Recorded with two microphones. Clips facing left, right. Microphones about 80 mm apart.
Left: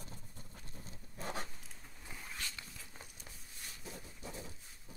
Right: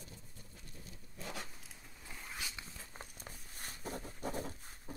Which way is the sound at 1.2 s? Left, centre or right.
Left.